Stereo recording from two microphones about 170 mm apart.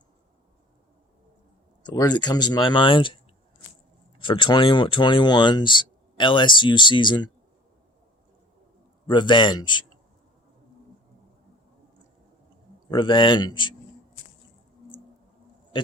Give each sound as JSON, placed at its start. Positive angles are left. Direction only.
{"t": 1.8, "sound": "speech", "side_deg": 25}
{"t": 4.2, "sound": "speech", "side_deg": 30}
{"t": 9.0, "sound": "speech", "side_deg": 25}
{"t": 12.9, "sound": "speech", "side_deg": 25}